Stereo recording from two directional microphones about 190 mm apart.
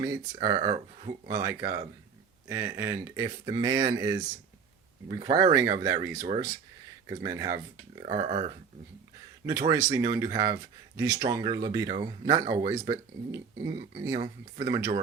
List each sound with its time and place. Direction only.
0.0 s speech: 25° right (ahead or behind)
9.5 s speech: 20° right (ahead or behind)